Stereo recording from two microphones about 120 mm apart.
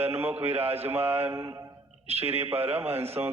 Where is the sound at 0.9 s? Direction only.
20° right (ahead or behind).